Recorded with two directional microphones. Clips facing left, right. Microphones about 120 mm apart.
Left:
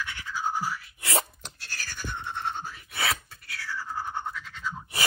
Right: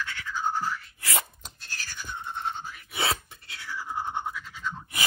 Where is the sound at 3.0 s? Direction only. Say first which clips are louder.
Right 1 dB; 25° right (ahead or behind).